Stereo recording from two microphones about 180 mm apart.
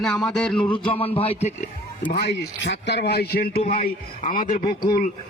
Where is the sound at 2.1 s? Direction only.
70° left (ahead or behind).